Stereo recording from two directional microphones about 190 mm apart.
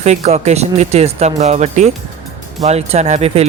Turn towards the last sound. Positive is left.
turn(degrees=-35)  # may be behind; listen again after turning